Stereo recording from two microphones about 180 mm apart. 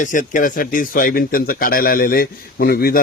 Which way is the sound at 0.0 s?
45° left (ahead or behind).